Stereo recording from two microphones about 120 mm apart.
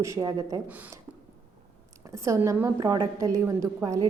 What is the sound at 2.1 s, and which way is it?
A woman's voice, 25° right (ahead or behind).